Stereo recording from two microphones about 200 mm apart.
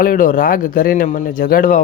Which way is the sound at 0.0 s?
45° left (ahead or behind).